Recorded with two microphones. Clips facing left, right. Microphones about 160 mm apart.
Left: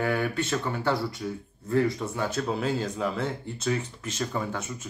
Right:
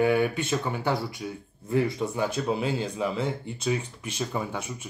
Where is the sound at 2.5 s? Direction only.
5° right (ahead or behind).